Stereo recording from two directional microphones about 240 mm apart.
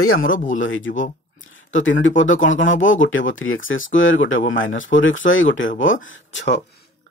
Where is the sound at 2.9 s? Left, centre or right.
Left.